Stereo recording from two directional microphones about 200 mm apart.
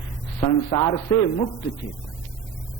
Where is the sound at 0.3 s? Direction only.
20° left (ahead or behind).